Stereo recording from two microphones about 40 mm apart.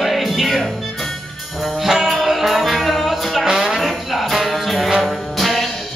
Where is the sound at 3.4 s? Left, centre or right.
Centre.